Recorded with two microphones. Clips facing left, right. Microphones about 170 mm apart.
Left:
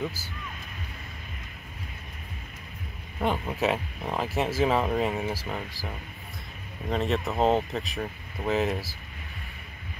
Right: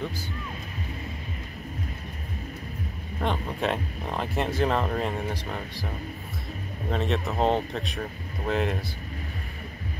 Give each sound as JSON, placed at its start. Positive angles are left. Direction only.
{"t": 3.2, "sound": "speech", "side_deg": 5}
{"t": 6.9, "sound": "speech", "side_deg": 0}